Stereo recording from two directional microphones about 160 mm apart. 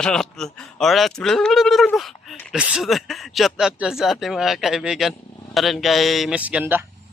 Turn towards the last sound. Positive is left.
turn(degrees=-10)  # may be behind; listen again after turning